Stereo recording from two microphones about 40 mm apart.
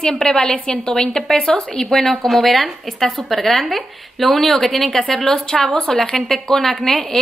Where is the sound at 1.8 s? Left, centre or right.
Centre.